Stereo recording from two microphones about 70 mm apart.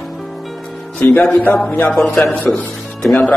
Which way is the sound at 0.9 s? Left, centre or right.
Left.